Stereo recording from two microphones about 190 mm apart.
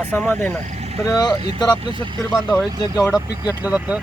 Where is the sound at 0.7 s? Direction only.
35° right (ahead or behind).